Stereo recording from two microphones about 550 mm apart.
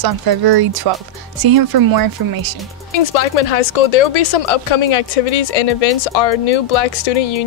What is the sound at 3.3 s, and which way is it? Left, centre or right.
Speech, left.